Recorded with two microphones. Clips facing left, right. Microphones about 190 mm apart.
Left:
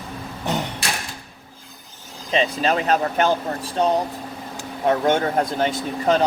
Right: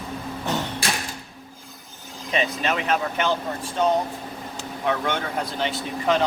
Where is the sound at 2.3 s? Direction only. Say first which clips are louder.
Left 4 dB; 30° left (ahead or behind).